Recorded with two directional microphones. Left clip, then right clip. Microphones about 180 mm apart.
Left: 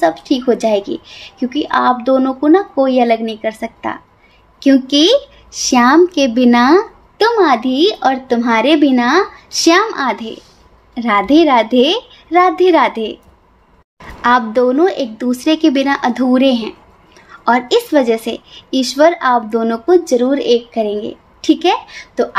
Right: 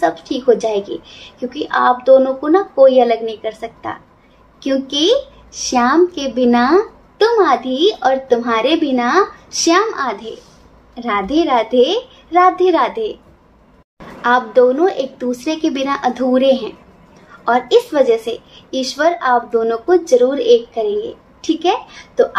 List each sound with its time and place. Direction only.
0.0 s a woman's voice: 50° left (ahead or behind)
14.2 s speech: 50° left (ahead or behind)